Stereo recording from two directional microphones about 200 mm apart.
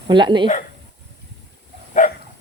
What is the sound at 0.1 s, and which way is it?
Speech, 25° right (ahead or behind).